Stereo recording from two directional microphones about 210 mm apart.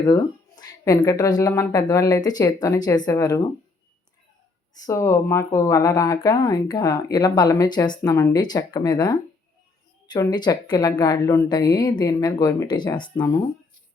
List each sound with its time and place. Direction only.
0.0 s speech: 20° left (ahead or behind)
4.9 s speech: 15° left (ahead or behind)